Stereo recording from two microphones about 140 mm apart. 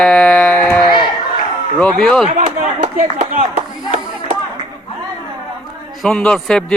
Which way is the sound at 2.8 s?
60° right (ahead or behind).